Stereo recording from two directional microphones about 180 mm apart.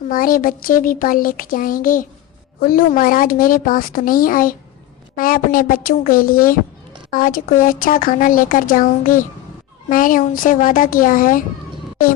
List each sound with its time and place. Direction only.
0.1 s speech: 50° left (ahead or behind)